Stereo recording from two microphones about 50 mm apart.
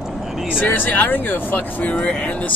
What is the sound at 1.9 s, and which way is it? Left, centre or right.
Speech, left.